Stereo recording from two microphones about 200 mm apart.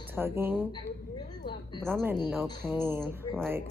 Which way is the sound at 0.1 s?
10° right (ahead or behind).